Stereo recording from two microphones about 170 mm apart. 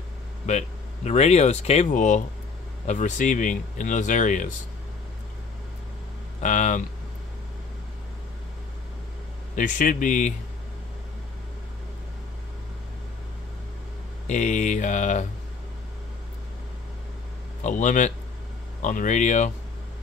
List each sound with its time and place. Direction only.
0.5 s speech: 40° left (ahead or behind)
6.4 s speech: 45° left (ahead or behind)
9.6 s speech: 50° left (ahead or behind)
14.2 s speech: 45° left (ahead or behind)
17.6 s speech: 45° left (ahead or behind)